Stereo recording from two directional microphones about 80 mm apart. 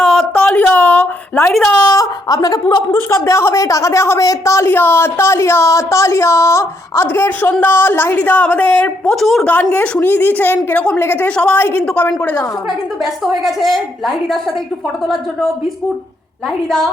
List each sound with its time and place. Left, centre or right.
0.0 s a sound: centre; by 1.5 s left
1.5 s a woman's voice: centre
1.9 s speech: left
2.9 s speech: left
4.7 s a woman's voice: left
9.1 s a woman's voice: centre
9.8 s a woman's voice: centre
11.3 s a woman's voice: centre
11.5 s a woman's voice: left
11.8 s a woman's voice: centre
12.2 s a woman's voice: left
12.6 s a woman's voice: centre
16.5 s a woman's voice: centre